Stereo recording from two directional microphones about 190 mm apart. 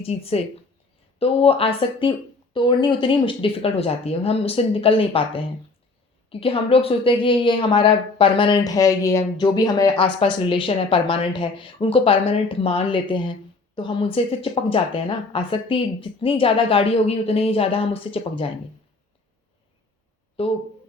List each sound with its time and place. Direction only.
0.0 s speech: 30° left (ahead or behind)
6.4 s speech: 30° left (ahead or behind)